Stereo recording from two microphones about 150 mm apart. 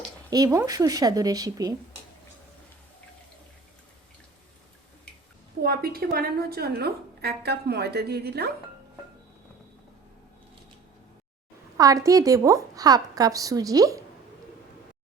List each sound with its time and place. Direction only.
0.3 s a woman's voice: 25° right (ahead or behind)
5.6 s a woman's voice: 90° right
11.8 s a woman's voice: 20° right (ahead or behind)